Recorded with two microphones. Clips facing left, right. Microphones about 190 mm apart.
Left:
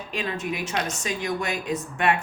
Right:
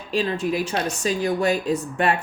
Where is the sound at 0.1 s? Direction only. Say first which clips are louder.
Right 7 dB; 30° right (ahead or behind).